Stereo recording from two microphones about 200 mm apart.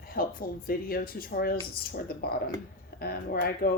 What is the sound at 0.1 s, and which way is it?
Speech, 45° left (ahead or behind).